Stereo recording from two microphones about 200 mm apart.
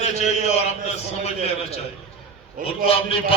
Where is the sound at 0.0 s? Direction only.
35° left (ahead or behind).